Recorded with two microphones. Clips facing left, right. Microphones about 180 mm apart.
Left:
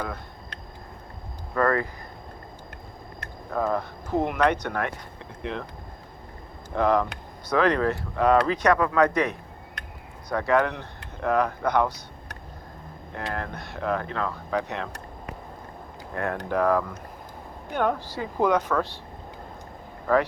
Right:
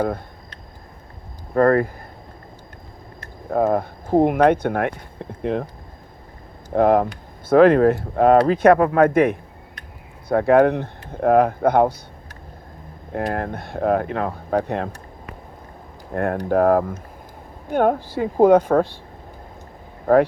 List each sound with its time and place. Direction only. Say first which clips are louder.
1.5 s speech: right 8 dB; 40° right (ahead or behind)
3.5 s speech: right 7 dB; 50° right (ahead or behind)
6.7 s speech: right 6 dB; 50° right (ahead or behind)
13.1 s speech: right 8 dB; 50° right (ahead or behind)
16.1 s speech: right 7 dB; 50° right (ahead or behind)